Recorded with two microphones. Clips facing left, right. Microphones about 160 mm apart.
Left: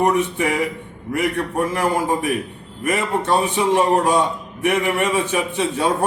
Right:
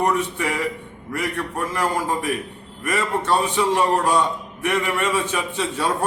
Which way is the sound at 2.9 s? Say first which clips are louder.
Left 2 dB; 20° left (ahead or behind).